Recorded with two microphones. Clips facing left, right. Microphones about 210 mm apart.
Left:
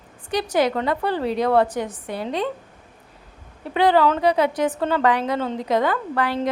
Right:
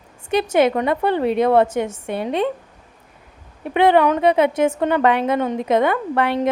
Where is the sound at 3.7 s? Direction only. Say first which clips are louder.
Right 3 dB; 20° right (ahead or behind).